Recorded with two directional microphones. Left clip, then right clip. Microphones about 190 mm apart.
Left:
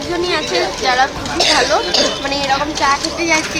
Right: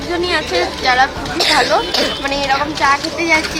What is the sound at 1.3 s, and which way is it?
Speech, 20° left (ahead or behind).